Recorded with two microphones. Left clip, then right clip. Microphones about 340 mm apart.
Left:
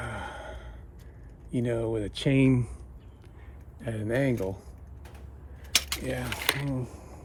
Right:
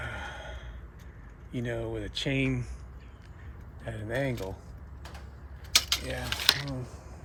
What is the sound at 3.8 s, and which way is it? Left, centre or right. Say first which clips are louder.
Speech: left 4 dB; left.